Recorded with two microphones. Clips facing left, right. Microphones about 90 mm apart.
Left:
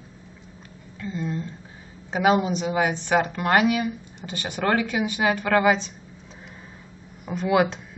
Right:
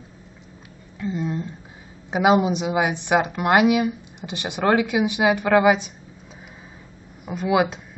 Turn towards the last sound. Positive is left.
turn(degrees=-5)  # may be behind; listen again after turning